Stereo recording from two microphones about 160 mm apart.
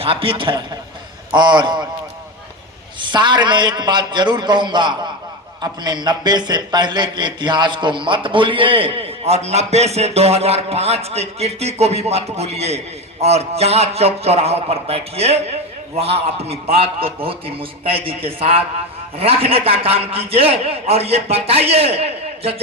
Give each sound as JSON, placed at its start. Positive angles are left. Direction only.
{"t": 0.0, "sound": "a man's voice", "side_deg": -35}
{"t": 3.0, "sound": "a man's voice", "side_deg": -30}